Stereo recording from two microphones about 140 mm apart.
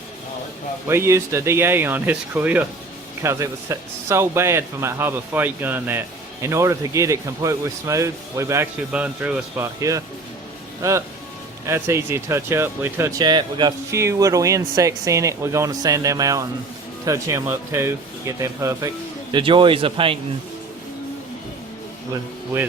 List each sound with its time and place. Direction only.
0.9 s a man's voice: 20° right (ahead or behind)
8.9 s a man's voice: 10° right (ahead or behind)
11.6 s speech: 20° right (ahead or behind)
19.3 s speech: 35° right (ahead or behind)